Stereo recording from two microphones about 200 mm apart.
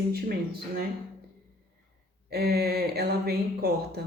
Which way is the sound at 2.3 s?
55° right (ahead or behind).